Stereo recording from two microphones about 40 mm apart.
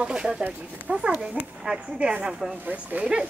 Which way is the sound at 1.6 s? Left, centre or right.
Right.